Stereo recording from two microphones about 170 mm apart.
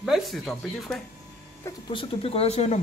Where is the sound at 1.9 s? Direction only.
30° left (ahead or behind).